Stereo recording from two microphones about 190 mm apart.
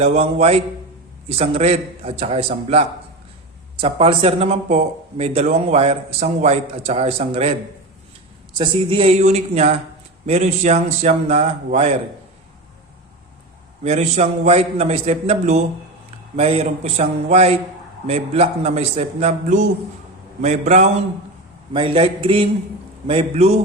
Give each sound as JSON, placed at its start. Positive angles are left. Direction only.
{"t": 0.0, "sound": "speech", "side_deg": -35}
{"t": 8.5, "sound": "speech", "side_deg": -25}
{"t": 13.8, "sound": "a man's voice", "side_deg": -35}